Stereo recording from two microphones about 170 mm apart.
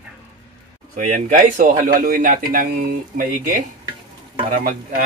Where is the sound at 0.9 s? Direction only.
55° right (ahead or behind).